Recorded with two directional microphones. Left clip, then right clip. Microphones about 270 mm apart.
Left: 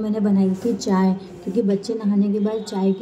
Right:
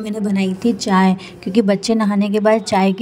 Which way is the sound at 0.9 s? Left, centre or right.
Right.